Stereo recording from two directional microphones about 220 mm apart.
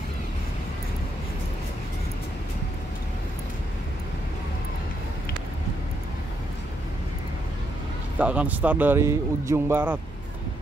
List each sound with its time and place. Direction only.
8.2 s speech: 5° right (ahead or behind)